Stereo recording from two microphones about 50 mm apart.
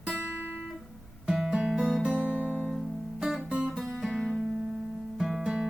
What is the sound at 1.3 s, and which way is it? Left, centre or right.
Guitar, centre.